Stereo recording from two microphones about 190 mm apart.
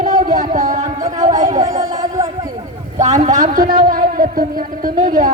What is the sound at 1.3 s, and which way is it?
Music, 40° right (ahead or behind).